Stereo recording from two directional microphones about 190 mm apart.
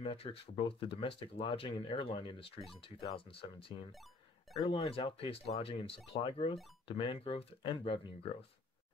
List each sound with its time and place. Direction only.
0.0 s speech: 30° left (ahead or behind)
3.9 s a sound: centre (ahead or behind)
4.6 s speech: 25° left (ahead or behind)